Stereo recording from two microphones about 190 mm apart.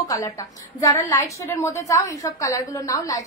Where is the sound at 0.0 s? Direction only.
20° left (ahead or behind).